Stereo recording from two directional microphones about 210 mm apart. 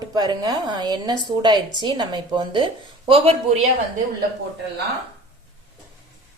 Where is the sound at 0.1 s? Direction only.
20° right (ahead or behind).